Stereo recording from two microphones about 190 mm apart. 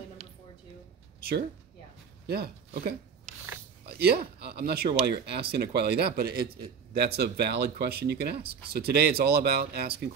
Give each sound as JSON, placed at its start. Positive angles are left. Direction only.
{"t": 2.2, "sound": "speech", "side_deg": -55}